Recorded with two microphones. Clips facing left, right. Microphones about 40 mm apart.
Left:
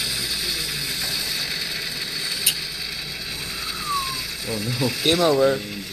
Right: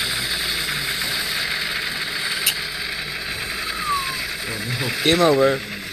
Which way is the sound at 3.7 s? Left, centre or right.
Right.